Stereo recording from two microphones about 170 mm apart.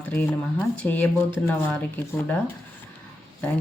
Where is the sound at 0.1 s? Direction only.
10° left (ahead or behind).